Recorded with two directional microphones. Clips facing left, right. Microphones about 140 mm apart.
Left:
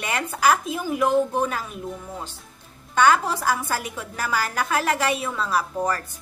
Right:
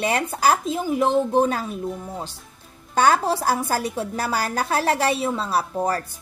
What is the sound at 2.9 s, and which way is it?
Speech, 35° right (ahead or behind).